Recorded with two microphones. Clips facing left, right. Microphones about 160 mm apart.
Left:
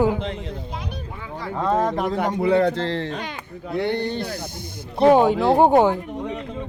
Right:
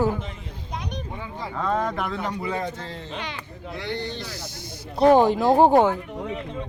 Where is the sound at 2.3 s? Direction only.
65° left (ahead or behind).